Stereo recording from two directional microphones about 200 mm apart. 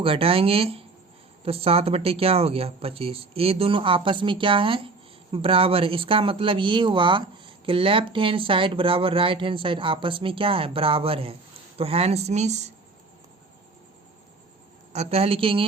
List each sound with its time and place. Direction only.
0.0 s speech: 25° right (ahead or behind)
14.9 s speech: 30° right (ahead or behind)